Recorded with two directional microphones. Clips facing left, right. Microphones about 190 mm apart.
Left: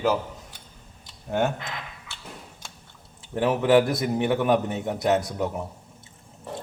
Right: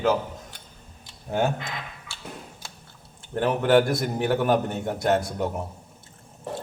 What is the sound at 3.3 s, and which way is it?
A man's voice, 5° left (ahead or behind).